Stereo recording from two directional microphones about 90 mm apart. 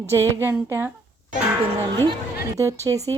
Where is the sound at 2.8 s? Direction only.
40° right (ahead or behind).